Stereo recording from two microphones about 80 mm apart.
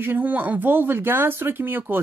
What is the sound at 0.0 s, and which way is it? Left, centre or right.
Speech, right.